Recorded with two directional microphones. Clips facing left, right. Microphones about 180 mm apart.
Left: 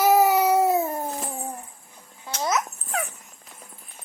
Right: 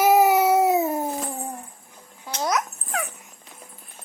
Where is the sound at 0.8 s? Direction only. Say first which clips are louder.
Right 3 dB; 5° right (ahead or behind).